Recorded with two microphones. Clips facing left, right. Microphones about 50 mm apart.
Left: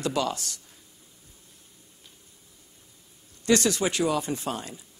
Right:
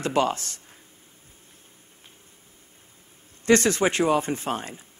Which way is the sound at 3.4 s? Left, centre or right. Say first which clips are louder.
Right 4 dB; right.